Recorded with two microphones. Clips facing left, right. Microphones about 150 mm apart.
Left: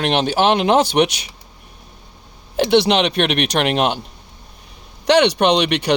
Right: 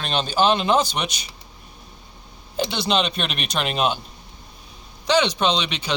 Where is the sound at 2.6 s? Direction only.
75° left (ahead or behind).